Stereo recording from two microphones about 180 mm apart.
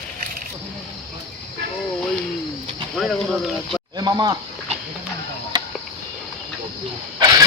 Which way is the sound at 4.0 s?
20° right (ahead or behind).